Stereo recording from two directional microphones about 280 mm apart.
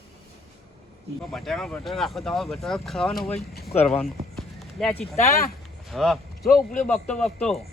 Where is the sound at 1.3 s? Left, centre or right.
Centre.